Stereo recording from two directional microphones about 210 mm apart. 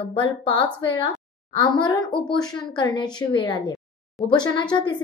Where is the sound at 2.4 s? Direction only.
20° left (ahead or behind).